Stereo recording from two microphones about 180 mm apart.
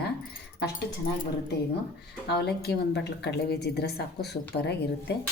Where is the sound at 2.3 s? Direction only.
65° left (ahead or behind).